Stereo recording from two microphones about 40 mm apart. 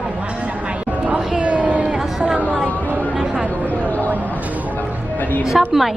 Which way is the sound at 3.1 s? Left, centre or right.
Right.